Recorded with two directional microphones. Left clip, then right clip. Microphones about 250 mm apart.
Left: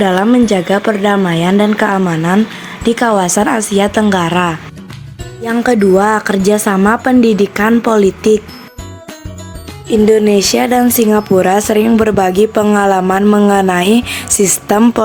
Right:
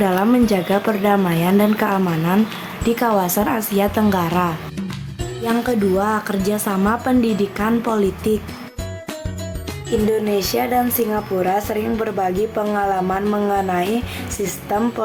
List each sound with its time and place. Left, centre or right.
0.0 s a woman's voice: left
10.1 s speech: left